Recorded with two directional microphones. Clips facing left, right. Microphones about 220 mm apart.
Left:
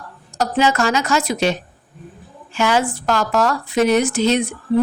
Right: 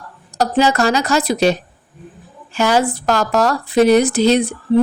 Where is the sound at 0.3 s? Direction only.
35° right (ahead or behind).